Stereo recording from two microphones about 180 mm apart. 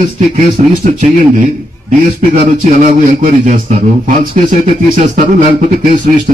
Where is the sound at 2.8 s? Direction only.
45° right (ahead or behind).